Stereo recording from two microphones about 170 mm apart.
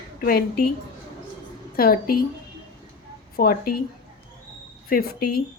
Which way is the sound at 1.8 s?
60° left (ahead or behind).